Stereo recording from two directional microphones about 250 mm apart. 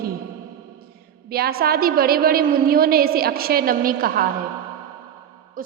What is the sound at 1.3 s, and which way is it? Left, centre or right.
A woman's voice, right.